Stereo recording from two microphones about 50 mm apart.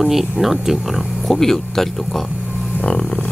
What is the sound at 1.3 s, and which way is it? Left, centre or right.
Speech, centre.